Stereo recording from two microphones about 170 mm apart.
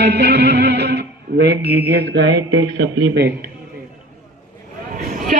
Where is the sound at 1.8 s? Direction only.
85° right.